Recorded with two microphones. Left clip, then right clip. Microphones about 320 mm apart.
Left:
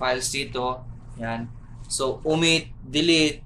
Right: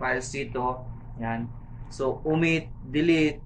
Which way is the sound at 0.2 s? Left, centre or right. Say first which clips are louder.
Left 3 dB; centre.